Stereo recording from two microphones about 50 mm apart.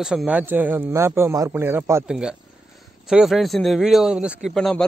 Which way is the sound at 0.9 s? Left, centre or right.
Right.